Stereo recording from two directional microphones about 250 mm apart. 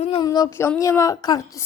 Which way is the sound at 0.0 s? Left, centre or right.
Centre.